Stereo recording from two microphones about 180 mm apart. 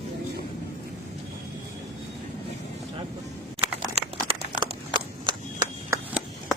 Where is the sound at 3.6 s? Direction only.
35° right (ahead or behind).